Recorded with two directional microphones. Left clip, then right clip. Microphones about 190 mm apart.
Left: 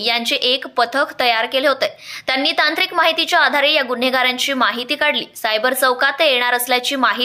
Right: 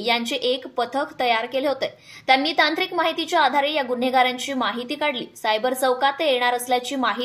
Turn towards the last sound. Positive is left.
turn(degrees=5)  # may be behind; listen again after turning